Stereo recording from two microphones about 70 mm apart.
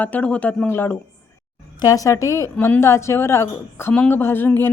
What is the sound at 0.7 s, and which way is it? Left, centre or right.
Speech, left.